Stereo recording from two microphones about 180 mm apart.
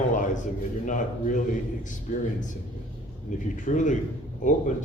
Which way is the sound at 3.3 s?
45° left (ahead or behind).